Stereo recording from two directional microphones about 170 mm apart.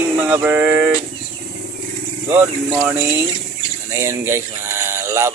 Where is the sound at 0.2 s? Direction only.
10° right (ahead or behind).